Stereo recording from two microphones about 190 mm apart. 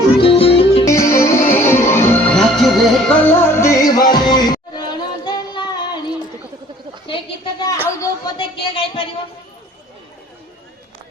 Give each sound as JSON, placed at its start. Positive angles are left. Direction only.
{"t": 0.2, "sound": "music", "side_deg": 30}
{"t": 0.9, "sound": "music", "side_deg": 15}
{"t": 3.6, "sound": "music", "side_deg": 15}
{"t": 7.1, "sound": "a sound", "side_deg": 25}